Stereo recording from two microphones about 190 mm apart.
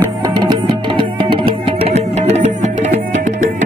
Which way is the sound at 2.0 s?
35° right (ahead or behind).